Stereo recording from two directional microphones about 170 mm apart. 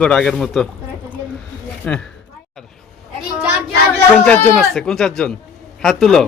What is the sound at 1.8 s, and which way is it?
Speech, 10° left (ahead or behind).